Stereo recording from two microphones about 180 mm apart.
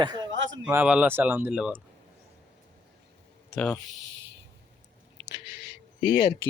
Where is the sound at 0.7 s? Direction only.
10° right (ahead or behind).